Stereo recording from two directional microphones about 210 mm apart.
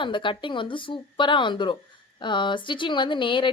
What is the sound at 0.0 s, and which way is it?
A woman's voice, 25° left (ahead or behind).